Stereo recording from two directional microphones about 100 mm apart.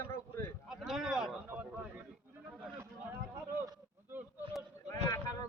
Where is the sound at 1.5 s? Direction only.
15° right (ahead or behind).